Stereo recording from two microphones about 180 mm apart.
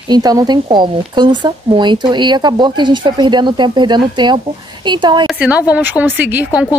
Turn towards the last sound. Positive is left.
turn(degrees=-5)  # may be behind; listen again after turning